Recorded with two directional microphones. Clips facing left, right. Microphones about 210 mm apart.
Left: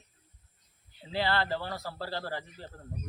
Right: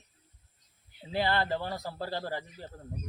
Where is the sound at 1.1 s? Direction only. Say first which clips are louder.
Right 1 dB; 15° right (ahead or behind).